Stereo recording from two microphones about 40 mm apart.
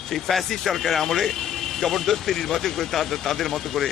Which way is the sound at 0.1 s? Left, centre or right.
Centre.